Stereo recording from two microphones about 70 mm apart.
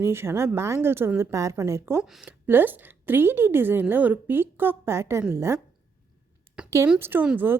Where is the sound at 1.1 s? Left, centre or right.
Right.